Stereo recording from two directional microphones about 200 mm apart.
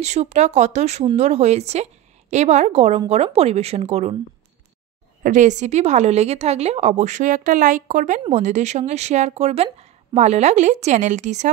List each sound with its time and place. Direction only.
0.0 s speech: 35° right (ahead or behind)
5.2 s speech: 40° right (ahead or behind)